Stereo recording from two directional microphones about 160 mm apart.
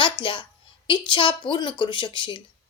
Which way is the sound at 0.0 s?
30° left (ahead or behind).